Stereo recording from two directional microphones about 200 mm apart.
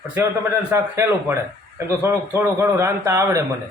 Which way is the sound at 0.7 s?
15° right (ahead or behind).